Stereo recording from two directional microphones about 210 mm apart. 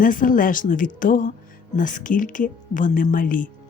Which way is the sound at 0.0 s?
40° left (ahead or behind).